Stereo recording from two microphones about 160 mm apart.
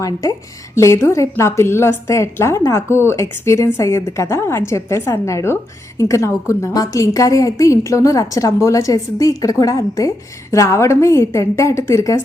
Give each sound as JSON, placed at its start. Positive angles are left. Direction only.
{"t": 0.0, "sound": "a woman's voice", "side_deg": 20}